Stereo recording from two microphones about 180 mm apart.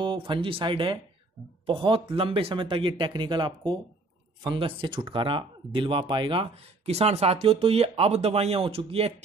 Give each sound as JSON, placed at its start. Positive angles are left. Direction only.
{"t": 0.0, "sound": "speech", "side_deg": -25}